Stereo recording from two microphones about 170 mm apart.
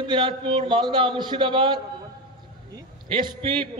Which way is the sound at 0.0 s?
30° right (ahead or behind).